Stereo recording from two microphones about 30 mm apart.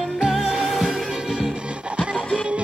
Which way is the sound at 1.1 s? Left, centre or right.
Centre.